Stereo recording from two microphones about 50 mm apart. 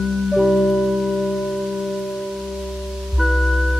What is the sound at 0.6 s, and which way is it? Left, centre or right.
Music, centre.